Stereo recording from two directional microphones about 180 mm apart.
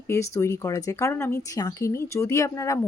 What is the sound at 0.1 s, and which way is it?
Speech, 15° left (ahead or behind).